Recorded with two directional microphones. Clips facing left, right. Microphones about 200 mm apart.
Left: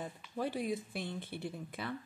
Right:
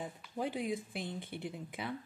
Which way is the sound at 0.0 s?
20° right (ahead or behind).